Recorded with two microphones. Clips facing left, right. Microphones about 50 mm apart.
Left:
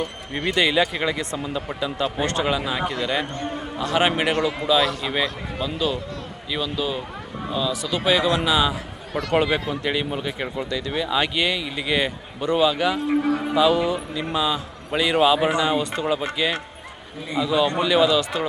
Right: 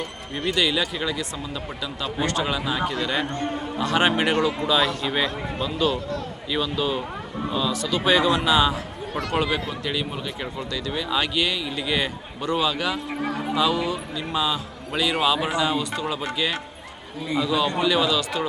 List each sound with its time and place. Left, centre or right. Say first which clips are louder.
0.3 s speech: left 3 dB; left
1.1 s speech: left 3 dB; left
1.5 s a man's voice: left 7 dB; centre
7.7 s a man's voice: even; centre
8.0 s a man's voice: even; centre
9.3 s a man's voice: left 4 dB; centre
15.8 s speech: left 2 dB; left
16.0 s a man's voice: left 3 dB; centre